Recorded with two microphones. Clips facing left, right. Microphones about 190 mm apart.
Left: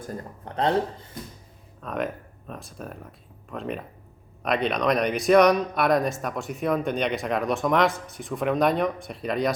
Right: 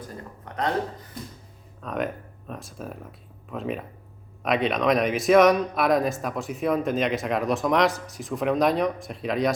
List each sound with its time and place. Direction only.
0.4 s speech: 30° left (ahead or behind)
1.8 s speech: centre (ahead or behind)